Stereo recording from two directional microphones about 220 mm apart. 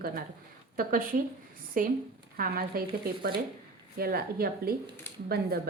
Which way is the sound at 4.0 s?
45° right (ahead or behind).